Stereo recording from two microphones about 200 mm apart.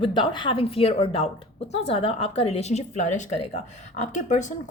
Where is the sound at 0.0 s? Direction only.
25° left (ahead or behind).